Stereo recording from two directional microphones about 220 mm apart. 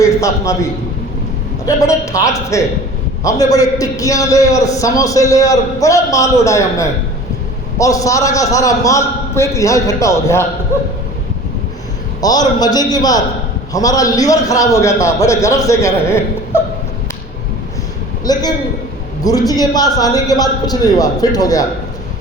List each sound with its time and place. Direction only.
0.0 s a man's voice: 15° left (ahead or behind)
12.2 s a man's voice: 15° left (ahead or behind)
18.3 s a man's voice: 15° left (ahead or behind)